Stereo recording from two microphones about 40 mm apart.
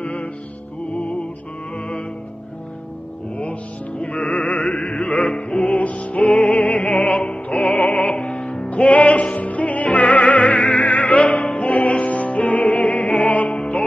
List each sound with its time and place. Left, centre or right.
0.0 s music: left
1.8 s music: left
3.3 s music: left
8.6 s music: left